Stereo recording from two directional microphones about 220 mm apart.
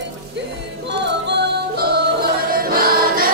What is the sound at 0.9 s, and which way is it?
Music, 50° right (ahead or behind).